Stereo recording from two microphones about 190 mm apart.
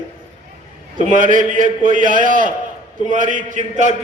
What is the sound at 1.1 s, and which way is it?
A man's voice, 45° right (ahead or behind).